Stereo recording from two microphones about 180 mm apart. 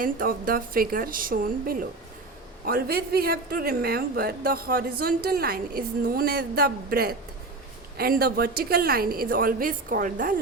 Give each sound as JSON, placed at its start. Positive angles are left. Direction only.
{"t": 0.0, "sound": "a woman's voice", "side_deg": -50}